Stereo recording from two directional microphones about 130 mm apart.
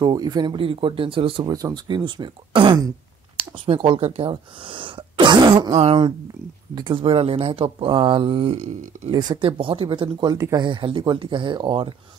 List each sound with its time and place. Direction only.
0.0 s speech: 30° right (ahead or behind)
1.5 s speech: 30° right (ahead or behind)
5.7 s speech: 50° right (ahead or behind)
6.7 s speech: 40° right (ahead or behind)
8.5 s speech: 70° right (ahead or behind)
9.1 s speech: 35° right (ahead or behind)
10.3 s speech: 30° right (ahead or behind)